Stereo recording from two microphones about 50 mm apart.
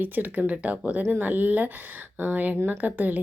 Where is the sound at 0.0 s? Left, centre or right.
Right.